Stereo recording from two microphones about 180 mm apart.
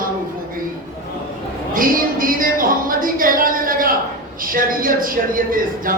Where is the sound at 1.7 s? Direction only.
50° right (ahead or behind).